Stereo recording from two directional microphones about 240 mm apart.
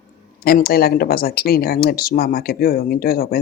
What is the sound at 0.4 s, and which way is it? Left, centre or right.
Speech, left.